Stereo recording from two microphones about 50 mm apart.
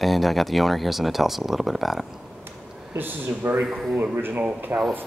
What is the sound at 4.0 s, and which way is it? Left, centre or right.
Speech, right.